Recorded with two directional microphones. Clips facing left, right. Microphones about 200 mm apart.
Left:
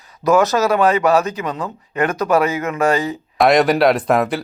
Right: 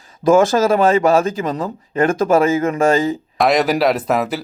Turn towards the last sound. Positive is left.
turn(degrees=-5)  # may be behind; listen again after turning